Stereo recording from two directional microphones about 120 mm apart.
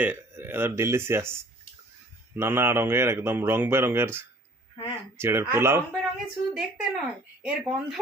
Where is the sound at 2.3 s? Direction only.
20° right (ahead or behind).